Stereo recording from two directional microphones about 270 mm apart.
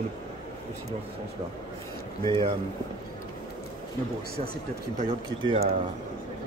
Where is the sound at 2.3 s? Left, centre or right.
Centre.